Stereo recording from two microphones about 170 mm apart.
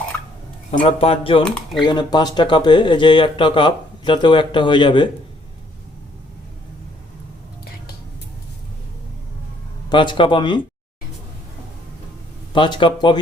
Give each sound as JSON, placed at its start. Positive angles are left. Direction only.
{"t": 0.7, "sound": "speech", "side_deg": 40}
{"t": 9.9, "sound": "speech", "side_deg": 30}
{"t": 12.5, "sound": "speech", "side_deg": 30}